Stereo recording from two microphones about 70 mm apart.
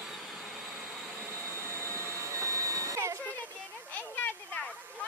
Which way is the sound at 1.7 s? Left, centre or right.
Right.